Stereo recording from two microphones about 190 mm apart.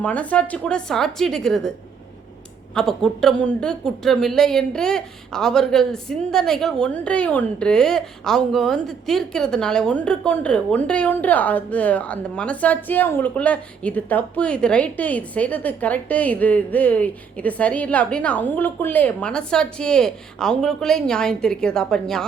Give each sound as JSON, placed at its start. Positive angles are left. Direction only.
{"t": 0.0, "sound": "speech", "side_deg": 5}
{"t": 2.7, "sound": "speech", "side_deg": 5}